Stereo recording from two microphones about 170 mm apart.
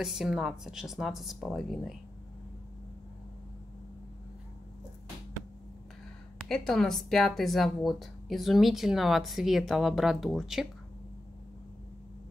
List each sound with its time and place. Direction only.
0.0 s a woman's voice: centre (ahead or behind)
6.5 s a woman's voice: 5° left (ahead or behind)